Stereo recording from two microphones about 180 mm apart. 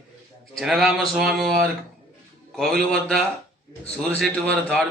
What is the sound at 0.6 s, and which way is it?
Speech, centre (ahead or behind).